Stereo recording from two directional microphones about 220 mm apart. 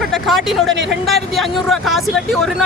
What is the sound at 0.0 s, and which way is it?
Speech, centre (ahead or behind).